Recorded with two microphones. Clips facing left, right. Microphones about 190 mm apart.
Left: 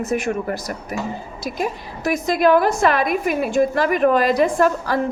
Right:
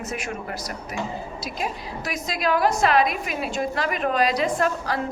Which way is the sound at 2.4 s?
55° left (ahead or behind).